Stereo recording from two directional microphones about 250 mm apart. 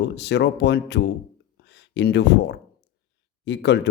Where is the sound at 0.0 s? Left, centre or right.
Left.